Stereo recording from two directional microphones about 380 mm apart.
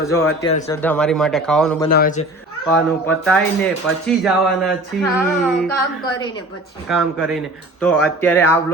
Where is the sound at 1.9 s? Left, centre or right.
Left.